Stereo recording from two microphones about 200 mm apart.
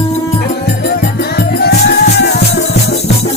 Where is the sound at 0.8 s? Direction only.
50° left (ahead or behind).